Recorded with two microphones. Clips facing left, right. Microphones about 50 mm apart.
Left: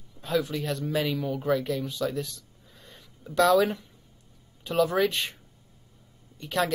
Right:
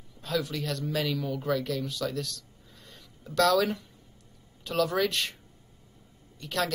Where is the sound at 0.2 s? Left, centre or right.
Centre.